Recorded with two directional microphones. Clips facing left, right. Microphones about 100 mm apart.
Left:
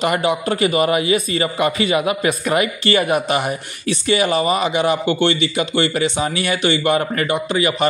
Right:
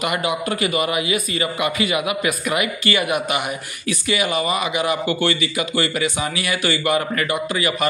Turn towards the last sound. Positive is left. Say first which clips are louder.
# left 3 dB
turn(degrees=25)  # may be behind; listen again after turning